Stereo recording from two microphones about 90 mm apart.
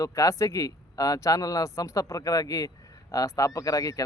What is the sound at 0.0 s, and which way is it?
Speech, 40° left (ahead or behind).